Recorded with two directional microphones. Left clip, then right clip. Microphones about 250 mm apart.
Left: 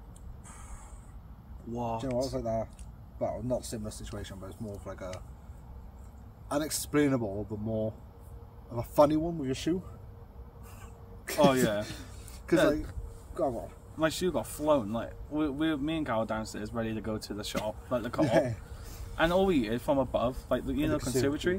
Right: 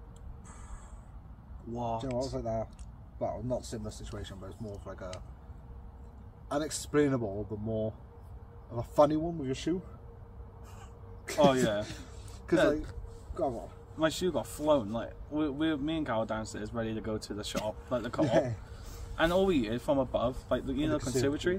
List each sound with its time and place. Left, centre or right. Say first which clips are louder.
1.7 s speech: left 1 dB; centre
2.3 s speech: left 2 dB; left
6.5 s speech: even; left
11.4 s speech: left 1 dB; centre
12.5 s speech: left 1 dB; left
13.6 s speech: left 1 dB; centre
18.2 s speech: left 1 dB; left
19.1 s speech: left 1 dB; centre